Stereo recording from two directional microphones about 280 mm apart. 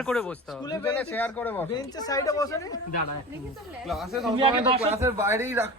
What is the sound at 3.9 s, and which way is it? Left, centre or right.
Speech, centre.